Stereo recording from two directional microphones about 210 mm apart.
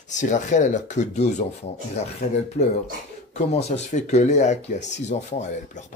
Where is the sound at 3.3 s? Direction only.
30° left (ahead or behind).